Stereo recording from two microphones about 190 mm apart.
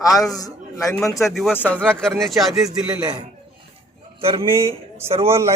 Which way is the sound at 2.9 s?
20° right (ahead or behind).